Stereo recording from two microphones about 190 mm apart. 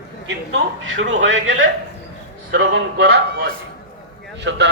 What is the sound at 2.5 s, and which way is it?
A man's voice, 70° right (ahead or behind).